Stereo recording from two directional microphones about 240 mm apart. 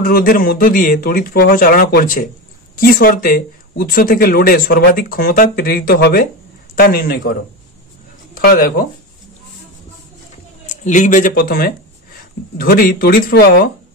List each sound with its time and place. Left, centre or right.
0.0 s speech: left
8.4 s speech: left
10.7 s speech: left